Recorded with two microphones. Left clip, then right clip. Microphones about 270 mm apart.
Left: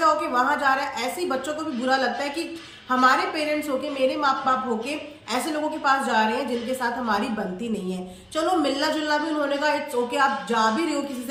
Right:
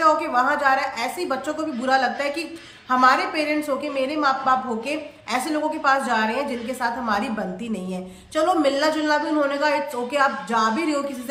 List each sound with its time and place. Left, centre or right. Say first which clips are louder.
0.0 s a woman's voice: right 2 dB; centre
8.4 s a woman's voice: right 3 dB; centre